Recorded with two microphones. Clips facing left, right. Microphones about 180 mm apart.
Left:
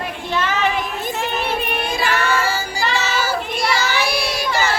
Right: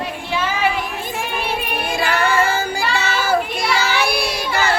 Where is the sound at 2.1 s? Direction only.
55° right (ahead or behind).